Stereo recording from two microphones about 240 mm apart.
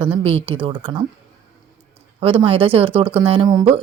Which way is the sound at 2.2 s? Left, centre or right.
Right.